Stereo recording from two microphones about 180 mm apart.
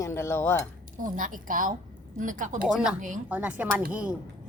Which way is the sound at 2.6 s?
5° right (ahead or behind).